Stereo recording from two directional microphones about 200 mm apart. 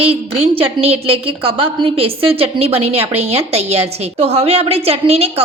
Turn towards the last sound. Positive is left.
turn(degrees=-30)  # may be behind; listen again after turning